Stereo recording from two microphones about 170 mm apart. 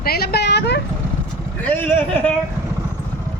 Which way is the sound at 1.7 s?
10° left (ahead or behind).